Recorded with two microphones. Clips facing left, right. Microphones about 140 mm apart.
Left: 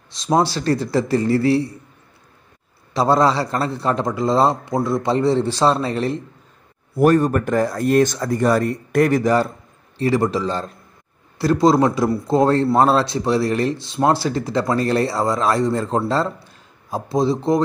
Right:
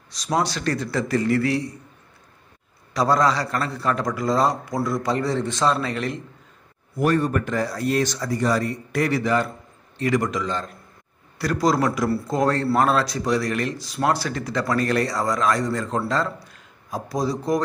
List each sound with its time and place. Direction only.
0.1 s speech: 25° left (ahead or behind)
2.9 s speech: 25° left (ahead or behind)
7.0 s speech: 45° left (ahead or behind)
9.9 s a man's voice: 30° left (ahead or behind)